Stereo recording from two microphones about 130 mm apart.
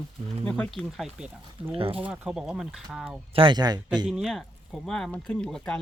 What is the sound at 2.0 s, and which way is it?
Speech, 10° right (ahead or behind).